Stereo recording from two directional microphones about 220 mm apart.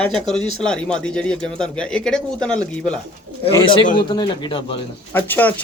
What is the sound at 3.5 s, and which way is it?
Speech, 20° left (ahead or behind).